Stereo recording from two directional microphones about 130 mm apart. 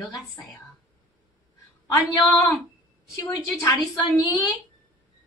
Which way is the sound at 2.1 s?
30° left (ahead or behind).